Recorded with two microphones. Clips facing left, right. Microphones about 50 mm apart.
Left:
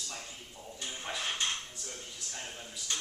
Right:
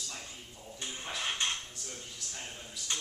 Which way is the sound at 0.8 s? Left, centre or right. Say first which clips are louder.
Even; right.